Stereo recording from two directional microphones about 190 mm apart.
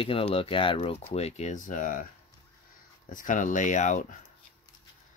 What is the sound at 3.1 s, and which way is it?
Speech, 45° left (ahead or behind).